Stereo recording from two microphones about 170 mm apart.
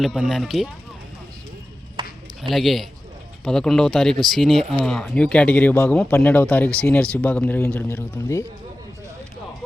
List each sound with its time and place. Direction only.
0.0 s speech: centre (ahead or behind)
2.0 s a sound: 30° right (ahead or behind)
2.4 s speech: centre (ahead or behind)